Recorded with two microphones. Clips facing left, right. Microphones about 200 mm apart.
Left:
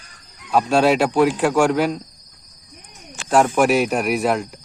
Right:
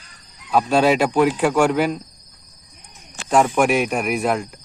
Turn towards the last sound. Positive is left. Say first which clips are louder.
# left 1 dB
turn(degrees=0)  # may be behind; listen again after turning